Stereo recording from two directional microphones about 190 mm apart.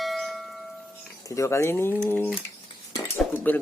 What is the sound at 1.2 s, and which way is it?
Speech, 15° left (ahead or behind).